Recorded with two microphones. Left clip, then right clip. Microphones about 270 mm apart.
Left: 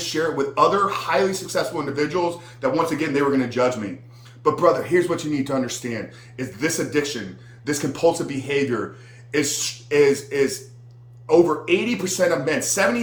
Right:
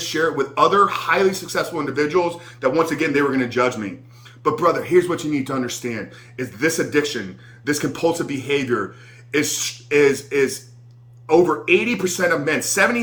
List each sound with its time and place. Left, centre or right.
0.0 s speech: centre